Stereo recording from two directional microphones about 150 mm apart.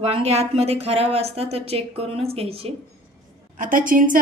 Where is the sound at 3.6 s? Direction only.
65° right (ahead or behind).